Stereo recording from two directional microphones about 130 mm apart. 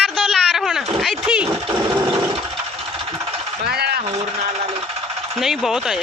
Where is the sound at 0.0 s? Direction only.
5° left (ahead or behind).